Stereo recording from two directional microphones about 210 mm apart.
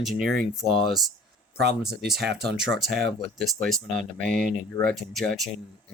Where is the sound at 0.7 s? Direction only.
25° left (ahead or behind).